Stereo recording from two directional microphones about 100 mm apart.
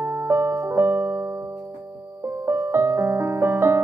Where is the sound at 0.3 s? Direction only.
25° right (ahead or behind).